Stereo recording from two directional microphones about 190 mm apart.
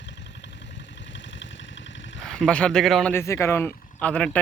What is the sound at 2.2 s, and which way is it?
Speech, 5° left (ahead or behind).